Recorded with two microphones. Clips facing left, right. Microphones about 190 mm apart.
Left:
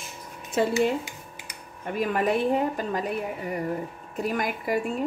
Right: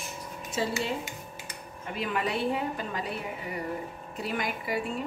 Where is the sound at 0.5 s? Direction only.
55° left (ahead or behind).